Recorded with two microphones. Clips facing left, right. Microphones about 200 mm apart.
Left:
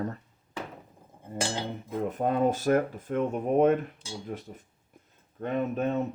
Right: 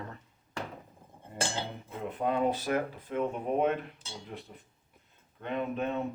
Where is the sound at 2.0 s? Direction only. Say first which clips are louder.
Left 3 dB; 45° left (ahead or behind).